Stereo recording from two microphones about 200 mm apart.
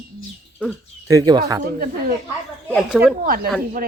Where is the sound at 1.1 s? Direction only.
20° right (ahead or behind).